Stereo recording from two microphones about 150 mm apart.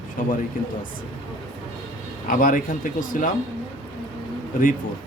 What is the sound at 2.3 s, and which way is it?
Speech, 65° left (ahead or behind).